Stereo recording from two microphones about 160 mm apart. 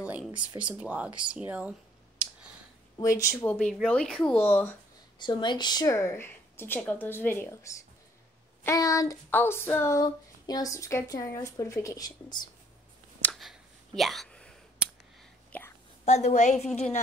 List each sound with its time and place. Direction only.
0.0 s a sound: 10° right (ahead or behind)
0.3 s speech: 30° right (ahead or behind)
0.7 s speech: 10° right (ahead or behind)
3.0 s a woman's voice: 20° left (ahead or behind)
3.9 s speech: 5° left (ahead or behind)
5.2 s a woman's voice: 30° left (ahead or behind)
13.2 s a sound: centre (ahead or behind)
14.8 s a sound: 5° right (ahead or behind)
15.5 s whispering: 10° left (ahead or behind)
16.1 s a woman's voice: 45° left (ahead or behind)